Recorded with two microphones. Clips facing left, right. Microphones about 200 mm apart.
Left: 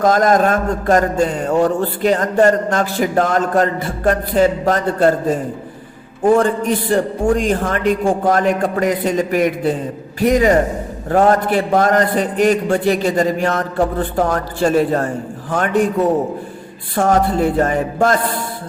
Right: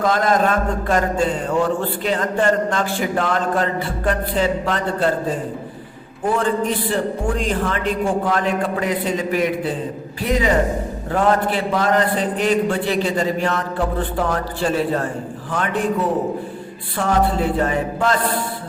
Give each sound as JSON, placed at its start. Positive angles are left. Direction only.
{"t": 0.0, "sound": "a man's voice", "side_deg": 45}
{"t": 6.2, "sound": "a man's voice", "side_deg": 45}